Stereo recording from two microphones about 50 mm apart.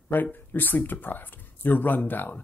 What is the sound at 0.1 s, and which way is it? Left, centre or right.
Speech, left.